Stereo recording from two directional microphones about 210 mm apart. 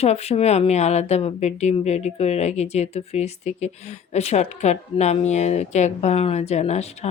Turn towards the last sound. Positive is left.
turn(degrees=30)  # may be behind; listen again after turning